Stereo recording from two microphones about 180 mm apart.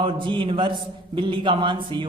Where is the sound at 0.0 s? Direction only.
25° right (ahead or behind).